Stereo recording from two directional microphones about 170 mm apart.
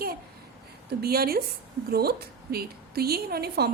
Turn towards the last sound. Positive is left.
turn(degrees=-70)  # may be behind; listen again after turning